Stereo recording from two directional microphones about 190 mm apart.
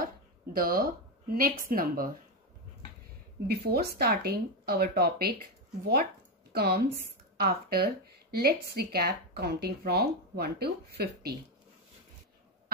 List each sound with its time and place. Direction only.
0.0 s a sound: 50° right (ahead or behind)
1.6 s speech: 50° right (ahead or behind)
3.4 s speech: 55° right (ahead or behind)
6.5 s speech: 55° right (ahead or behind)